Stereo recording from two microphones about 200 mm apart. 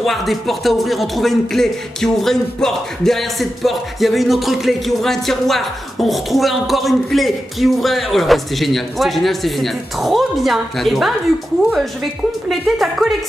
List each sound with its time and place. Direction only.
0.0 s speech: centre (ahead or behind)
12.4 s speech: centre (ahead or behind)